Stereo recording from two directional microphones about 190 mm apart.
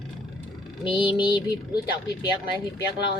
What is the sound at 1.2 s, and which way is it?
Speech, 25° left (ahead or behind).